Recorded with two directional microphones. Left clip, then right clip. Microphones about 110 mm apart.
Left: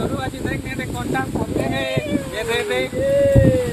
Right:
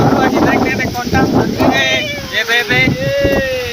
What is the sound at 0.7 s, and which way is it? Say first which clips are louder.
Vehicle: right 9 dB; 20° right (ahead or behind).